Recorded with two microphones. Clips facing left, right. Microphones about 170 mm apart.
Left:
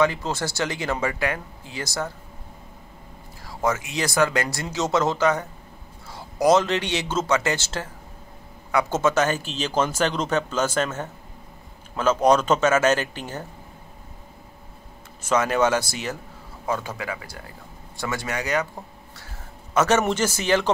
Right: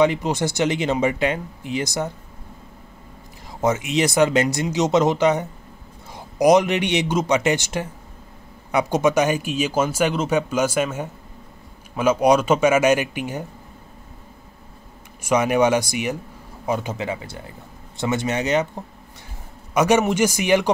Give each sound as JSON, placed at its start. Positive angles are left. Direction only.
{"t": 0.0, "sound": "speech", "side_deg": -20}
{"t": 3.4, "sound": "speech", "side_deg": -20}
{"t": 15.2, "sound": "speech", "side_deg": -15}
{"t": 19.7, "sound": "speech", "side_deg": -15}